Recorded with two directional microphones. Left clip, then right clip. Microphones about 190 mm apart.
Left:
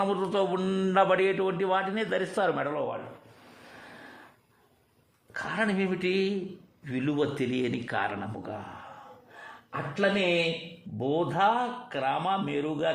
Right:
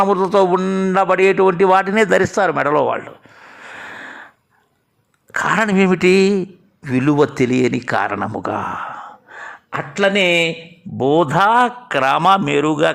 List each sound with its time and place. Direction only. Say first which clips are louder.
0.1 s a man's voice: right 14 dB; 35° right (ahead or behind)
0.5 s speech: right 10 dB; 20° right (ahead or behind)
1.0 s a man's voice: right 12 dB; 35° right (ahead or behind)
2.6 s a man's voice: right 16 dB; 50° right (ahead or behind)
5.3 s a man's voice: right 14 dB; 40° right (ahead or behind)
8.4 s a man's voice: right 17 dB; 45° right (ahead or behind)